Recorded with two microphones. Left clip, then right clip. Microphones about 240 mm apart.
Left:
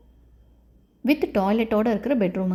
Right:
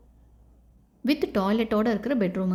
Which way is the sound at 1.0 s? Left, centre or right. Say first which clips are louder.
Left 3 dB; centre.